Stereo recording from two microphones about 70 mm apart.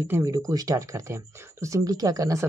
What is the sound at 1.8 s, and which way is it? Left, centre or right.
Speech, right.